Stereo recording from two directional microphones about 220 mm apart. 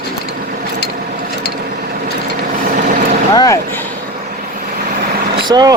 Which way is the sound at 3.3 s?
15° left (ahead or behind).